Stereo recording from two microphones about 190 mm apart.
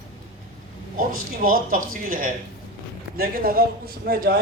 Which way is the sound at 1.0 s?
50° right (ahead or behind).